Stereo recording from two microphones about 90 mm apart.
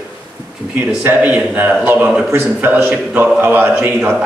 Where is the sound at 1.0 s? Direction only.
15° right (ahead or behind).